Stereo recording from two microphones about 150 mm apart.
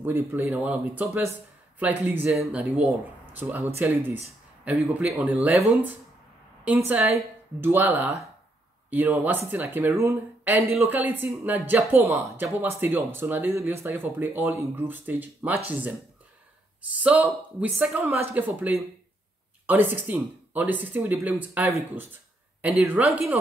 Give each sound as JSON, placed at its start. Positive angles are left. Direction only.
{"t": 0.0, "sound": "speech", "side_deg": -15}
{"t": 6.9, "sound": "speech", "side_deg": -15}
{"t": 17.0, "sound": "speech", "side_deg": -10}